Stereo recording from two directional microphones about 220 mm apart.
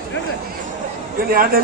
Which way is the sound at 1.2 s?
40° right (ahead or behind).